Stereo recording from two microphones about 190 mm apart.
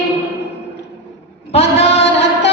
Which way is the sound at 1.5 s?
35° left (ahead or behind).